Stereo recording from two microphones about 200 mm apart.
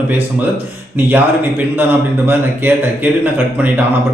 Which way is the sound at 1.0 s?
10° right (ahead or behind).